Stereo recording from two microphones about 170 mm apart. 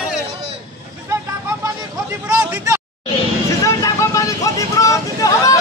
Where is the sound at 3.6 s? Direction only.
20° left (ahead or behind).